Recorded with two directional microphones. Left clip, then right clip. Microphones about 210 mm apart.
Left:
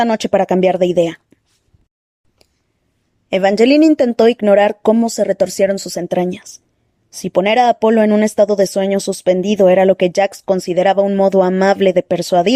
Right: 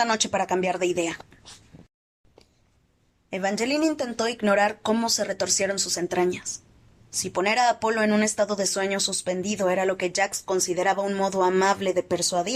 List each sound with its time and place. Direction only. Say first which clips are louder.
0.0 s speech: left 9 dB; 35° left (ahead or behind)
3.2 s speech: left 15 dB; 40° left (ahead or behind)